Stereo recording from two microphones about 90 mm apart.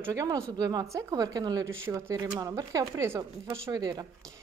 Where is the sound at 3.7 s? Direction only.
50° right (ahead or behind).